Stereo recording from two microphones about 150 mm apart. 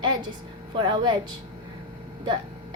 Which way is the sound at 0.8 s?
30° right (ahead or behind).